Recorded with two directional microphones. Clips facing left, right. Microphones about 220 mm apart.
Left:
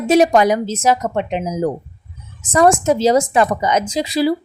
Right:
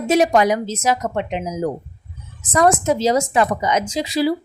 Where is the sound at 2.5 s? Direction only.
30° left (ahead or behind).